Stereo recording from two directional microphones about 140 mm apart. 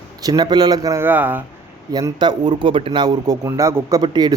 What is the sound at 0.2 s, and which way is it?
Speech, 30° right (ahead or behind).